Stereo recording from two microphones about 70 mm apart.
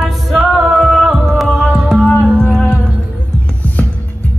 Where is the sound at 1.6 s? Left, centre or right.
Right.